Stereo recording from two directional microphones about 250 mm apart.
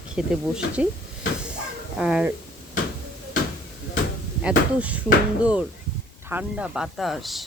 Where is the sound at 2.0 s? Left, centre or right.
Centre.